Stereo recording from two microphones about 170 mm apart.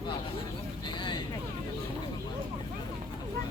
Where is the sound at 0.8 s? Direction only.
25° left (ahead or behind).